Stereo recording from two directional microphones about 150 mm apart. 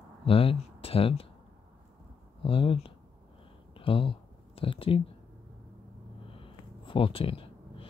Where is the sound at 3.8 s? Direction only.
35° left (ahead or behind).